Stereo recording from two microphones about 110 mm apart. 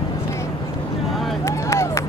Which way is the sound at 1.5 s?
25° left (ahead or behind).